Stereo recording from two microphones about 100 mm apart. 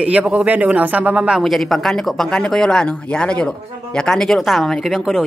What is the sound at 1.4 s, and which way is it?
Speech, centre (ahead or behind).